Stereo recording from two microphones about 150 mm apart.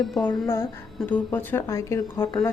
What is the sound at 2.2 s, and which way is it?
Speech, 30° left (ahead or behind).